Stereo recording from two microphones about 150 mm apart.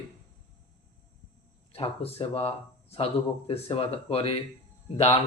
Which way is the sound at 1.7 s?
40° left (ahead or behind).